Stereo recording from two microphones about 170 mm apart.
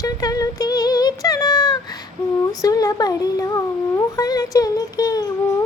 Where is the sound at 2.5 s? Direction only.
20° left (ahead or behind).